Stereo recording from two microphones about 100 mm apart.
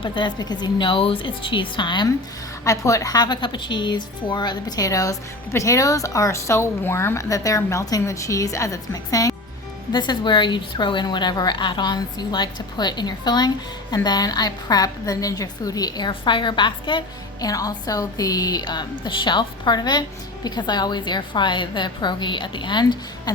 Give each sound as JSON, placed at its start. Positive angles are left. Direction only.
{"t": 0.0, "sound": "a woman's voice", "side_deg": 55}
{"t": 2.6, "sound": "a woman's voice", "side_deg": 35}
{"t": 9.9, "sound": "a woman's voice", "side_deg": 45}
{"t": 17.4, "sound": "a woman's voice", "side_deg": 40}